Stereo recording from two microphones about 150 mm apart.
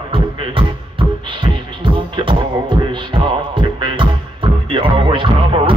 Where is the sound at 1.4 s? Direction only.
35° right (ahead or behind).